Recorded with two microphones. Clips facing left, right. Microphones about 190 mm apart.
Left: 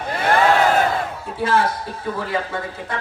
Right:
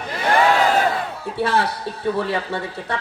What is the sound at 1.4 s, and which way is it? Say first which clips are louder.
Speech: left 1 dB; 70° right (ahead or behind).